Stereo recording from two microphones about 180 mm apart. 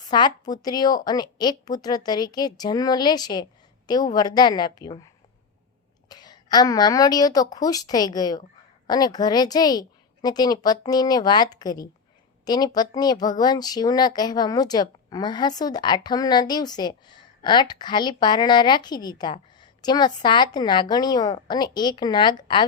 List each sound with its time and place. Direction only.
0.1 s speech: 25° left (ahead or behind)